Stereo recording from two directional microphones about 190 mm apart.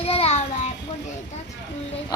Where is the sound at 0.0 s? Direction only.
30° left (ahead or behind).